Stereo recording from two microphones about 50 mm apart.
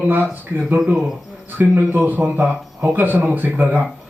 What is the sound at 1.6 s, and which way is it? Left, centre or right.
Speech, right.